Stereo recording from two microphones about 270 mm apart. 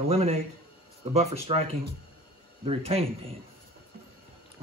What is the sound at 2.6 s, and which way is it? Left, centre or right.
Speech, right.